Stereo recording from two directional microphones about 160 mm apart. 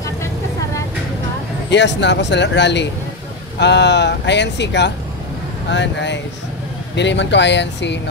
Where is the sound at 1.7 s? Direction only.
90° left.